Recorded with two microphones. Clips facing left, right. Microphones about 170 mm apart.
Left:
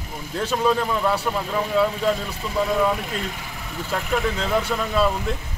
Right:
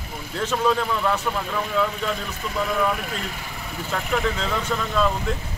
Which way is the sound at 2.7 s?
20° left (ahead or behind).